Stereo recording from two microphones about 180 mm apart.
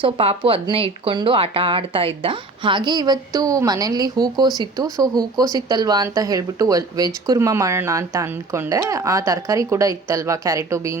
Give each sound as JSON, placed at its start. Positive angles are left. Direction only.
{"t": 0.0, "sound": "speech", "side_deg": -30}